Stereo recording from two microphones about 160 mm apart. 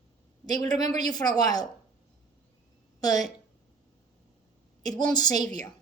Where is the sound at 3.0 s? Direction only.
25° left (ahead or behind).